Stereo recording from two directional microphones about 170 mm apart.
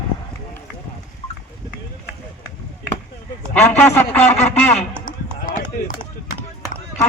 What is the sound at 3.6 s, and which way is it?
Speech, 15° left (ahead or behind).